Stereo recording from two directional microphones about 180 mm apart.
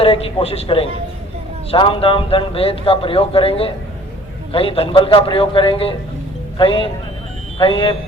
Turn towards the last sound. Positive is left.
turn(degrees=30)  # may be behind; listen again after turning